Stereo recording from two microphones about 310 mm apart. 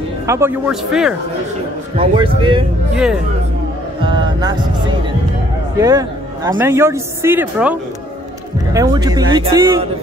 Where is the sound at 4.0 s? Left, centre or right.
Centre.